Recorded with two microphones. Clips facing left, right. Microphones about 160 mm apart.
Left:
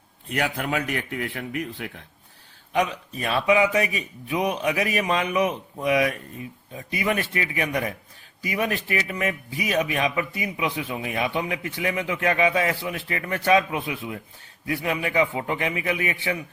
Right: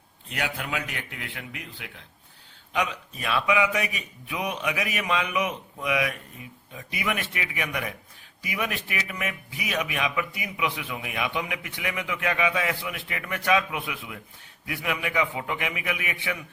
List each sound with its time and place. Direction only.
0.3 s a man's voice: 45° left (ahead or behind)
2.7 s a man's voice: 40° left (ahead or behind)